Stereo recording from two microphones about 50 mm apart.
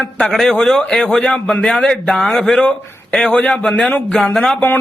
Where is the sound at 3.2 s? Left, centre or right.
Left.